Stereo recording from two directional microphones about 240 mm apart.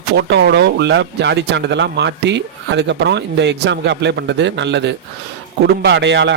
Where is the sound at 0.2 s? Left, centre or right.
Right.